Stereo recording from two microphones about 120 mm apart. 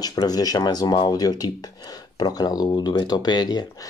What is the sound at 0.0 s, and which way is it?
Speech, 35° left (ahead or behind).